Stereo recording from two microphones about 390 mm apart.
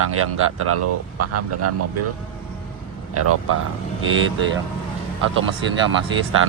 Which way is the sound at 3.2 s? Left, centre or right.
Right.